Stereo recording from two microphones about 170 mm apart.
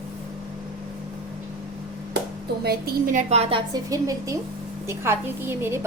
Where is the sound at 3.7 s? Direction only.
20° right (ahead or behind).